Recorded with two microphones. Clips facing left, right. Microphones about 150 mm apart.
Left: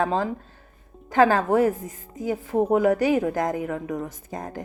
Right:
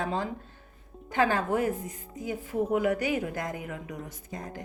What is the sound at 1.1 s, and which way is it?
A woman's voice, 40° left (ahead or behind).